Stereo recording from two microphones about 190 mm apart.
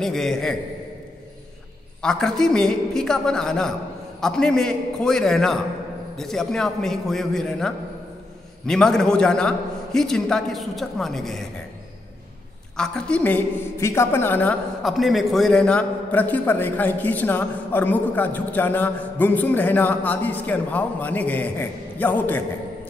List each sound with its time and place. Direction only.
0.0 s a man's voice: centre (ahead or behind)
2.0 s a man's voice: 5° left (ahead or behind)
12.7 s a woman's voice: 5° left (ahead or behind)